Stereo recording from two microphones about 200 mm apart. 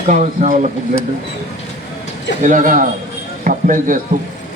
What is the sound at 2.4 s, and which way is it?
Speech, 40° right (ahead or behind).